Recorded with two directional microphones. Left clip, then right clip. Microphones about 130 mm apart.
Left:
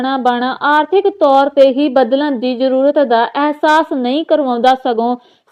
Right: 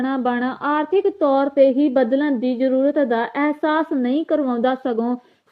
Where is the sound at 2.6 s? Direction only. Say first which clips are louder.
Left 7 dB; 10° right (ahead or behind).